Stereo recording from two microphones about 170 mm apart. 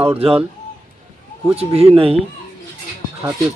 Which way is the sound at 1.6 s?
35° right (ahead or behind).